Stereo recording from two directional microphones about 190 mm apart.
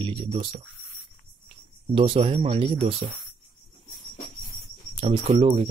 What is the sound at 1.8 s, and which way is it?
Speech, 30° right (ahead or behind).